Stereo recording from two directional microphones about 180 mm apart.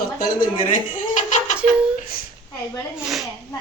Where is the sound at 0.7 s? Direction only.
45° left (ahead or behind).